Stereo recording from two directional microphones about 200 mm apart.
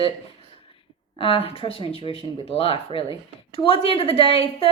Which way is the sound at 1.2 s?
30° left (ahead or behind).